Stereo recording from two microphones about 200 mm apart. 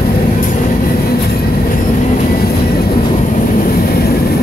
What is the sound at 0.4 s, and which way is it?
Train, 45° left (ahead or behind).